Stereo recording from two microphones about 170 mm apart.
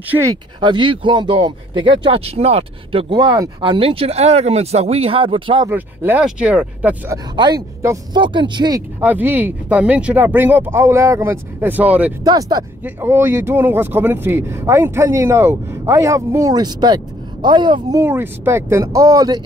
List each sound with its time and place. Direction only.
0.1 s speech: 20° right (ahead or behind)
3.2 s speech: 20° right (ahead or behind)
5.7 s speech: 10° right (ahead or behind)
7.3 s speech: 25° right (ahead or behind)
9.0 s speech: 10° right (ahead or behind)
12.2 s speech: 20° right (ahead or behind)
12.8 s speech: 15° right (ahead or behind)